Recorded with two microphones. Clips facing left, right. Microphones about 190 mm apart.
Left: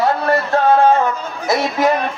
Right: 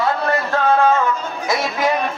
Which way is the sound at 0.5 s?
35° left (ahead or behind).